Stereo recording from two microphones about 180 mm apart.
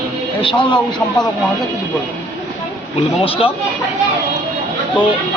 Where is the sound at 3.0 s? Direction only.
30° left (ahead or behind).